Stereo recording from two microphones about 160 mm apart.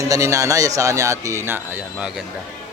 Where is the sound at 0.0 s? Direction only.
20° right (ahead or behind).